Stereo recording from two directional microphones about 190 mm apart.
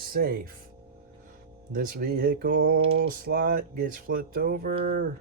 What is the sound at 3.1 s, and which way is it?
Speech, 50° right (ahead or behind).